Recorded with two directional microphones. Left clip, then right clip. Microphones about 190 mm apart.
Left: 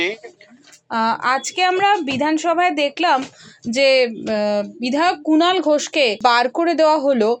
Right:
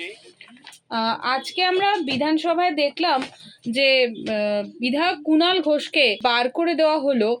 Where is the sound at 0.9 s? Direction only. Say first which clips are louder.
Left 5 dB; 30° left (ahead or behind).